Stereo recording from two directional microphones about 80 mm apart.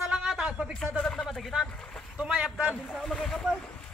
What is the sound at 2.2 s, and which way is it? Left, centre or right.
Speech, centre.